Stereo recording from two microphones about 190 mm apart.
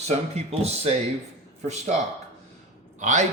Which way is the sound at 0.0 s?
35° right (ahead or behind).